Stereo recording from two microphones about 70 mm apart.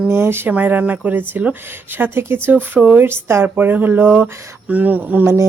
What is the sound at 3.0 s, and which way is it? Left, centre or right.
Speech, right.